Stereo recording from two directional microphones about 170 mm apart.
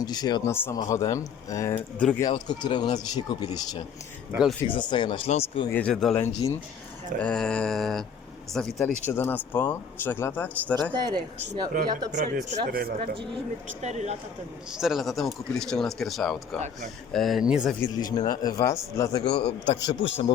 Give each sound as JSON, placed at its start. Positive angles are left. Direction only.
{"t": 0.0, "sound": "speech", "side_deg": 25}
{"t": 0.5, "sound": "speech", "side_deg": 15}
{"t": 2.0, "sound": "speech", "side_deg": 5}
{"t": 2.2, "sound": "speech", "side_deg": 25}
{"t": 4.3, "sound": "speech", "side_deg": -5}
{"t": 4.7, "sound": "speech", "side_deg": 25}
{"t": 5.7, "sound": "speech", "side_deg": 5}
{"t": 6.2, "sound": "speech", "side_deg": 15}
{"t": 12.1, "sound": "speech", "side_deg": -60}
{"t": 13.8, "sound": "speech", "side_deg": -40}
{"t": 14.7, "sound": "speech", "side_deg": -5}
{"t": 17.7, "sound": "speech", "side_deg": 25}
{"t": 19.2, "sound": "a man's voice", "side_deg": 80}
{"t": 19.8, "sound": "speech", "side_deg": 25}